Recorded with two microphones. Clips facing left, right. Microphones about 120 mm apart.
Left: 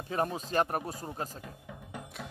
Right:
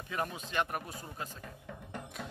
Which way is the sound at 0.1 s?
35° left (ahead or behind).